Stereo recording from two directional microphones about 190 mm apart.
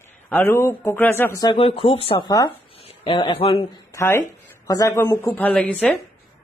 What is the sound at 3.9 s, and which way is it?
A woman's voice, 15° left (ahead or behind).